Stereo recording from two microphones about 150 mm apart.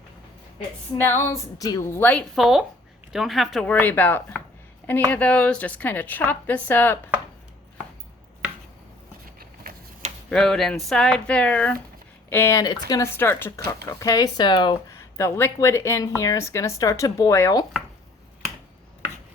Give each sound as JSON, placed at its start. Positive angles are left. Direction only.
{"t": 1.0, "sound": "a woman's voice", "side_deg": 15}
{"t": 2.3, "sound": "a woman's voice", "side_deg": 0}
{"t": 9.7, "sound": "a sound", "side_deg": -75}
{"t": 10.2, "sound": "a woman's voice", "side_deg": 5}
{"t": 15.2, "sound": "speech", "side_deg": 15}